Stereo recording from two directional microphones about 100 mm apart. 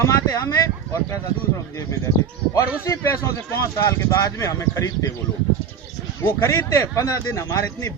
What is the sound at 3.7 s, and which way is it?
A man's voice, 30° left (ahead or behind).